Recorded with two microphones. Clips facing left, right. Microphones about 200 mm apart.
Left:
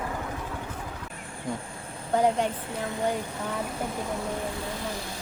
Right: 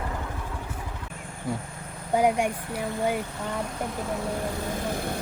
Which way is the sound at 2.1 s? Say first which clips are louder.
Right 1 dB; 10° right (ahead or behind).